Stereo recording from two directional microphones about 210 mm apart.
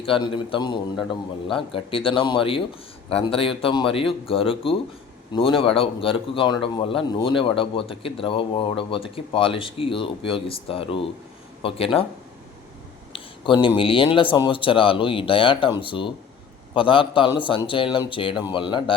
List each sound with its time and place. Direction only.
0.0 s a man's voice: 25° left (ahead or behind)
13.1 s a man's voice: 25° left (ahead or behind)